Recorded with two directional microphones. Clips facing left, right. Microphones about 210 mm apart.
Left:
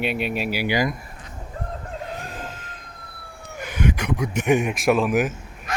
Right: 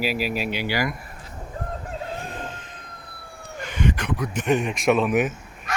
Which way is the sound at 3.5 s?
10° left (ahead or behind).